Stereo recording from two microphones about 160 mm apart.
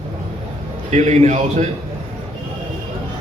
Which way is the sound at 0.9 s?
45° right (ahead or behind).